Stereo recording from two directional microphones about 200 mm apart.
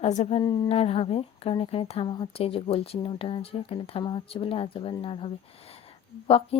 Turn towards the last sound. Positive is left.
turn(degrees=30)  # may be behind; listen again after turning